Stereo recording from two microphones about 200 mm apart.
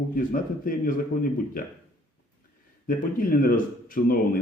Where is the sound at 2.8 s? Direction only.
45° left (ahead or behind).